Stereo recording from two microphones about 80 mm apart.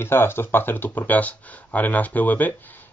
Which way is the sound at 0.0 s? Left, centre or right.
Left.